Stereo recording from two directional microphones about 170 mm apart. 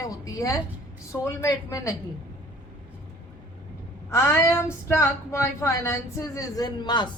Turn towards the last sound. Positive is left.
turn(degrees=25)  # may be behind; listen again after turning